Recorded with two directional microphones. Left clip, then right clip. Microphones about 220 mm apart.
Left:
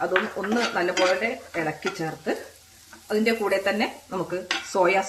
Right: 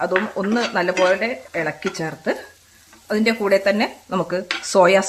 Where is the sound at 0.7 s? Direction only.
40° right (ahead or behind).